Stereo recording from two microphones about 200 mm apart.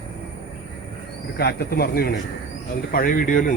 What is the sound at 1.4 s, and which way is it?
Speech, 55° left (ahead or behind).